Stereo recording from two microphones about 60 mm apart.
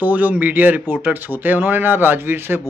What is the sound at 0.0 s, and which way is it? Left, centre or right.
Speech, right.